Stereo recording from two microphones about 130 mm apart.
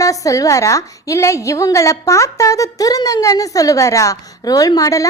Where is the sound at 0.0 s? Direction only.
25° left (ahead or behind).